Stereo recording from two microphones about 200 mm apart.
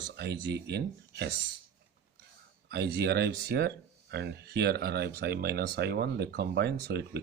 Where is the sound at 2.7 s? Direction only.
55° right (ahead or behind).